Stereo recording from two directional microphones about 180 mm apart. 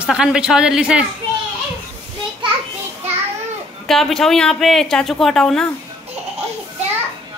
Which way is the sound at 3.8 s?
Centre (ahead or behind).